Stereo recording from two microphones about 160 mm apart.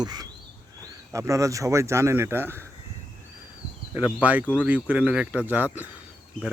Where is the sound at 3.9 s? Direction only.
10° right (ahead or behind).